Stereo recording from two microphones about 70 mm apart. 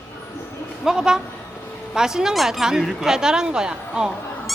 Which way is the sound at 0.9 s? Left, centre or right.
Centre.